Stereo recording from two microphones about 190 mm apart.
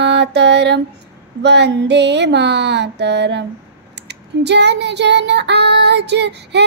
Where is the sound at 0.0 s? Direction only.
65° right (ahead or behind).